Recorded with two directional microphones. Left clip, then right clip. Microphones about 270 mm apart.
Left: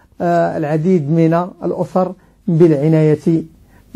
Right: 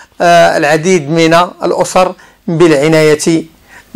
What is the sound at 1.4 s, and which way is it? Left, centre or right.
Speech, centre.